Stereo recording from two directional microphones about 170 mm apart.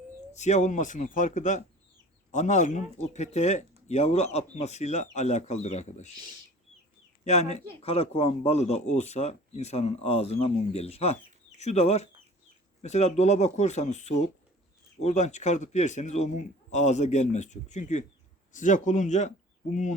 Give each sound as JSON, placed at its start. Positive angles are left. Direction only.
{"t": 0.3, "sound": "a man's voice", "side_deg": 45}
{"t": 7.3, "sound": "a man's voice", "side_deg": 40}